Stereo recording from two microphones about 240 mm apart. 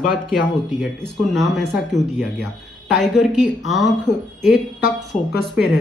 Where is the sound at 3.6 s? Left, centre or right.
Centre.